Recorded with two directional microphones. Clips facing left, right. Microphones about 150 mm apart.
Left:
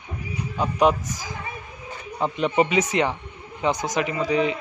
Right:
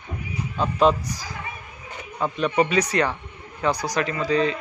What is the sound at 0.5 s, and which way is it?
A man's voice, 15° left (ahead or behind).